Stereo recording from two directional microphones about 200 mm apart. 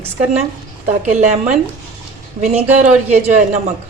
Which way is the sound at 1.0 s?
35° right (ahead or behind).